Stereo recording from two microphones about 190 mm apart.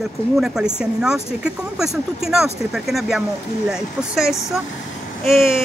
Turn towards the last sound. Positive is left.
turn(degrees=0)  # may be behind; listen again after turning